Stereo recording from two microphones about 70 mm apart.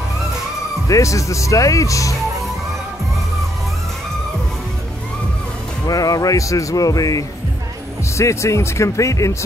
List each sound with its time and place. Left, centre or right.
0.8 s speech: left
5.9 s speech: left
8.2 s speech: left